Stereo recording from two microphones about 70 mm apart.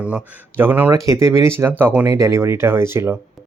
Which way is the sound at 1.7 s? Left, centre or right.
Right.